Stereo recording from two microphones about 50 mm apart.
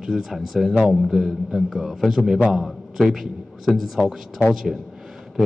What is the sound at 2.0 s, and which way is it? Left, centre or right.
A man's voice, centre.